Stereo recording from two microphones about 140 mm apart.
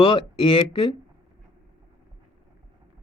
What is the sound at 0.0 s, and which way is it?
Speech, 40° left (ahead or behind).